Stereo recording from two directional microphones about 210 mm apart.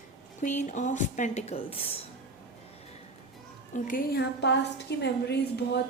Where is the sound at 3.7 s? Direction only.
40° left (ahead or behind).